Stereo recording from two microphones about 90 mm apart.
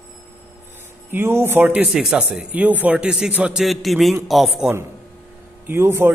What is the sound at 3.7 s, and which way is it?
Speech, centre (ahead or behind).